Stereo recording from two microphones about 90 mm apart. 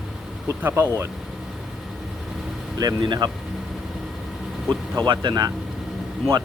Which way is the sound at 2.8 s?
50° right (ahead or behind).